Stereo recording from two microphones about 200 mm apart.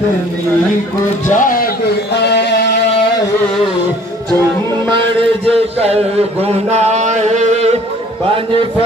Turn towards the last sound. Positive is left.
turn(degrees=-35)  # may be behind; listen again after turning